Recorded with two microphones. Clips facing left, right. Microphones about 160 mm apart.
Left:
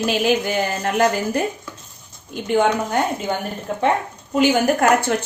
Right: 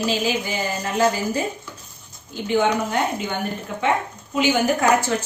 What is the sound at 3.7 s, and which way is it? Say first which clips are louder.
Speech: left 5 dB; 40° left (ahead or behind).